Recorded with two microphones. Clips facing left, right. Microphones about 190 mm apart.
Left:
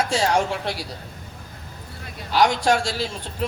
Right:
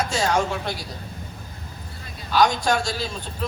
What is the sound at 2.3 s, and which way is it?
Speech, 30° left (ahead or behind).